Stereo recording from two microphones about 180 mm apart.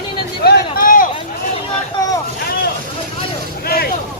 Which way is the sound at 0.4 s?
55° left (ahead or behind).